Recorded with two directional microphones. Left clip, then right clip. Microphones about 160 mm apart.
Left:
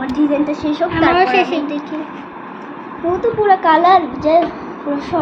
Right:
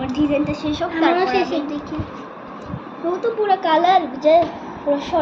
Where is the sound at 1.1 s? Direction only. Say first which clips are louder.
Left 5 dB; 20° left (ahead or behind).